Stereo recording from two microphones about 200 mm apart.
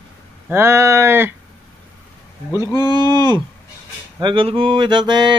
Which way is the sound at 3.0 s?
20° right (ahead or behind).